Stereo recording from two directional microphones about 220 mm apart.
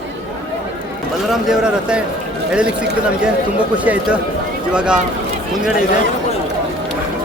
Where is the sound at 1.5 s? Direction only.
5° right (ahead or behind).